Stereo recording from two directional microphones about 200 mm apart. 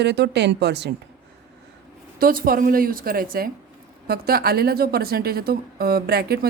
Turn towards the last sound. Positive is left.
turn(degrees=-50)  # may be behind; listen again after turning